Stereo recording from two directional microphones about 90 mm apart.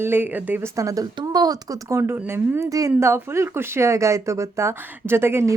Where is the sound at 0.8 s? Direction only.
40° right (ahead or behind).